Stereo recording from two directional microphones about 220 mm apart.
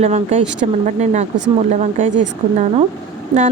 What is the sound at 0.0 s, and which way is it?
A woman's voice, 30° right (ahead or behind).